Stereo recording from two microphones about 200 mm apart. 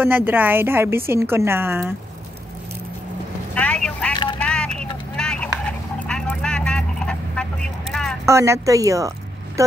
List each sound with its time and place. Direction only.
0.0 s a woman's voice: 10° right (ahead or behind)
3.5 s vehicle: 5° left (ahead or behind)
7.9 s a sound: centre (ahead or behind)
8.3 s a woman's voice: 15° right (ahead or behind)